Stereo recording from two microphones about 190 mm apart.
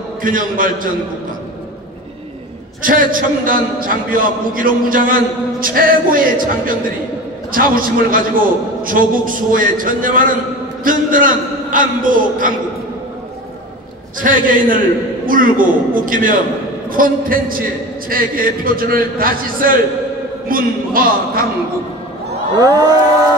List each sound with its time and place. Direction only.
0.2 s a man's voice: 45° right (ahead or behind)
2.8 s a man's voice: 45° right (ahead or behind)
14.2 s a man's voice: 45° right (ahead or behind)
22.6 s a sound: 20° right (ahead or behind)